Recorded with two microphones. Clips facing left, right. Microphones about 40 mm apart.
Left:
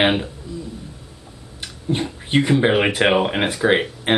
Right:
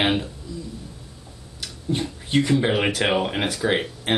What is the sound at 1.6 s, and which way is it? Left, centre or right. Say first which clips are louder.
Speech: left 3 dB; left.